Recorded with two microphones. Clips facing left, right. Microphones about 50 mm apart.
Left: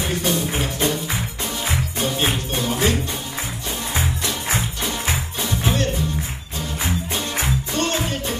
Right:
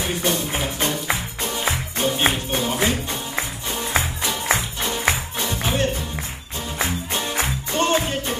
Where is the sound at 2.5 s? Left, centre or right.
Centre.